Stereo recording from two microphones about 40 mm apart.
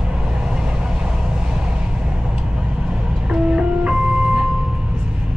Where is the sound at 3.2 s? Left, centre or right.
Centre.